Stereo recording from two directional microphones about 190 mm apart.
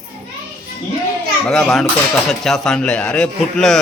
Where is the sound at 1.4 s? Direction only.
5° left (ahead or behind).